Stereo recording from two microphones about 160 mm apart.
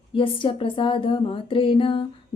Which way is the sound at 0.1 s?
35° left (ahead or behind).